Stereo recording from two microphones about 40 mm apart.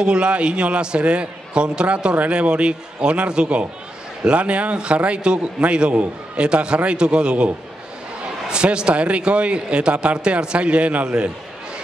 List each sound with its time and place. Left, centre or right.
0.0 s a man's voice: right
11.1 s a man's voice: right